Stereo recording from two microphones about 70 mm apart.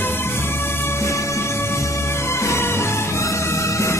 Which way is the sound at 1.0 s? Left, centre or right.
Left.